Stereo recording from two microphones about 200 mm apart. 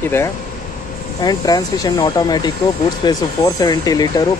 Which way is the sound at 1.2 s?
20° left (ahead or behind).